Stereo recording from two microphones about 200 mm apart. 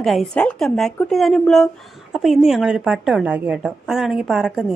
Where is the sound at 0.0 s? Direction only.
Centre (ahead or behind).